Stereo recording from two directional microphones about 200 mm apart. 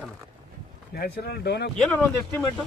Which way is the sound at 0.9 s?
50° left (ahead or behind).